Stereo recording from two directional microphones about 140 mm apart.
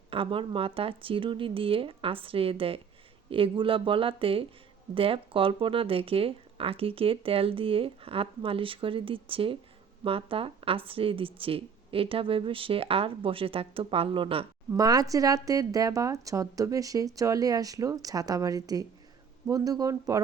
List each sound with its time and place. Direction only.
0.1 s speech: 40° right (ahead or behind)
14.7 s speech: 25° right (ahead or behind)